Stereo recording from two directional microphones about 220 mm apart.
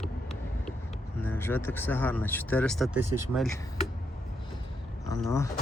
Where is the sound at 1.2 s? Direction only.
10° left (ahead or behind).